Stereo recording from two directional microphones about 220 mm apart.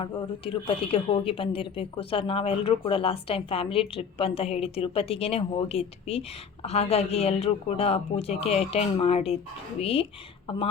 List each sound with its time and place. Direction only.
0.0 s a woman's voice: 25° left (ahead or behind)